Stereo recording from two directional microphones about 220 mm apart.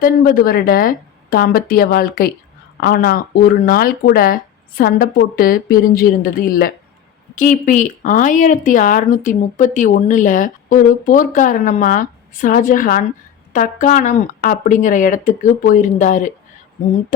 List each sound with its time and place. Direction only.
0.0 s speech: 40° left (ahead or behind)